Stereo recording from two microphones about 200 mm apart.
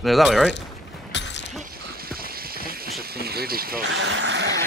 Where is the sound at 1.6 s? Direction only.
50° right (ahead or behind).